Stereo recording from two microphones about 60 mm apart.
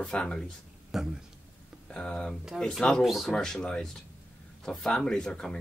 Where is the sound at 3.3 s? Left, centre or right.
Centre.